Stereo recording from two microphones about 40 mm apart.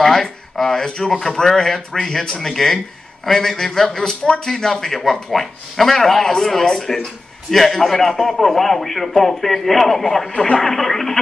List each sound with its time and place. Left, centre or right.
0.0 s a man's voice: centre
10.3 s speech: left
10.6 s a man's voice: centre